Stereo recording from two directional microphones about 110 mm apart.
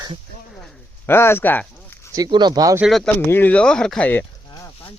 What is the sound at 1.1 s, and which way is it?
Speech, 20° left (ahead or behind).